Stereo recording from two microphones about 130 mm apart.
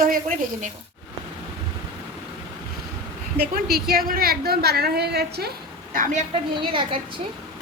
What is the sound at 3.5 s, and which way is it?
Speech, 90° right.